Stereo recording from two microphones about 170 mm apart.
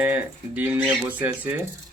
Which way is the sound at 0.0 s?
10° right (ahead or behind).